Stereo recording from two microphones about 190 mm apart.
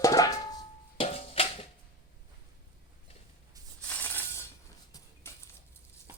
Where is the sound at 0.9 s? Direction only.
30° left (ahead or behind).